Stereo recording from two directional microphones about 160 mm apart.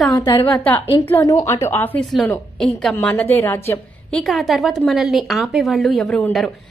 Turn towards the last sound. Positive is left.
turn(degrees=5)  # may be behind; listen again after turning